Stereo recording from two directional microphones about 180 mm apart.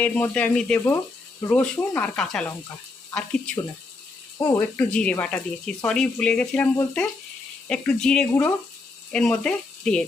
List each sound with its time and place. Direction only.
0.0 s speech: 10° left (ahead or behind)
4.4 s speech: 15° left (ahead or behind)
4.9 s speech: 5° left (ahead or behind)
7.7 s speech: 5° left (ahead or behind)